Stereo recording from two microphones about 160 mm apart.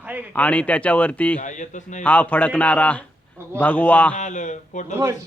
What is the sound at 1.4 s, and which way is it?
Speech, 50° left (ahead or behind).